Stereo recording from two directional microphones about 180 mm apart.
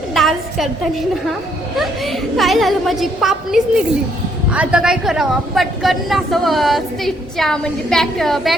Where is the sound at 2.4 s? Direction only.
Centre (ahead or behind).